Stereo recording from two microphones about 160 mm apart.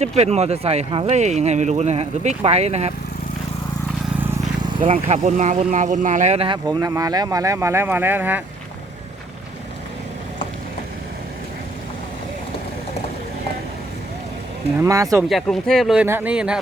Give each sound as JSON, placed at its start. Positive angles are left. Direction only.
{"t": 0.0, "sound": "speech", "side_deg": -40}
{"t": 4.7, "sound": "speech", "side_deg": -35}
{"t": 6.7, "sound": "speech", "side_deg": -20}
{"t": 14.8, "sound": "speech", "side_deg": -20}
{"t": 15.3, "sound": "speech", "side_deg": 0}
{"t": 16.0, "sound": "speech", "side_deg": -10}